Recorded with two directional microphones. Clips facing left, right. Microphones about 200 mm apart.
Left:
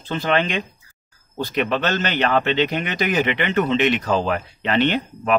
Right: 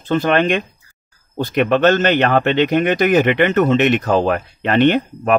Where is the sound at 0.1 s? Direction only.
50° right (ahead or behind).